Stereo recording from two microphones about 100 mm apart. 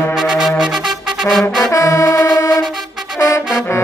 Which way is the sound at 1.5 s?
30° left (ahead or behind).